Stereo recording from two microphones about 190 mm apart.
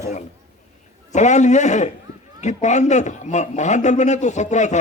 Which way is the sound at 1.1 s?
40° left (ahead or behind).